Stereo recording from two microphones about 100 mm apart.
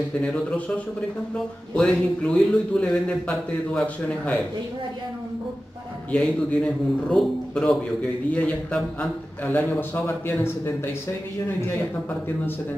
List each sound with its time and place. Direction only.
1.3 s a man's voice: 10° left (ahead or behind)
6.1 s a man's voice: 10° left (ahead or behind)
8.3 s a man's voice: 15° left (ahead or behind)
9.4 s a man's voice: 20° left (ahead or behind)